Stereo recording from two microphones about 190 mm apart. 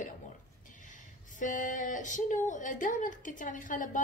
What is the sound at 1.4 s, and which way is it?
A woman's voice, 45° left (ahead or behind).